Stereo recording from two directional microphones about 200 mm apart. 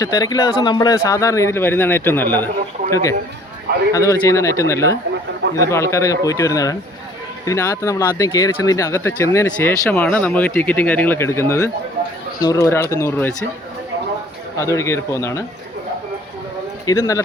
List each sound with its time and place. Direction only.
0.0 s speech: 20° left (ahead or behind)
14.6 s speech: 15° left (ahead or behind)
16.8 s speech: 15° left (ahead or behind)